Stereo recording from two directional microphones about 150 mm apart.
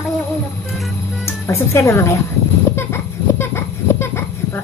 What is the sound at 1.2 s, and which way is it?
Speech, 15° left (ahead or behind).